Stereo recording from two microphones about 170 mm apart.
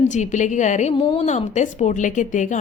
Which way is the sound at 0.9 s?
25° left (ahead or behind).